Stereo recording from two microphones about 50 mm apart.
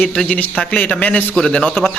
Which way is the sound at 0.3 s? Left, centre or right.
Left.